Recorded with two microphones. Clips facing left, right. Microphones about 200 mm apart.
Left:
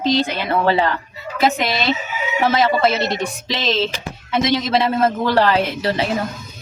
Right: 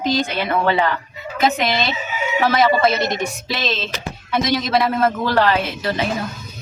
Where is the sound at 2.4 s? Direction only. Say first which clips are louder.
Even; 20° left (ahead or behind).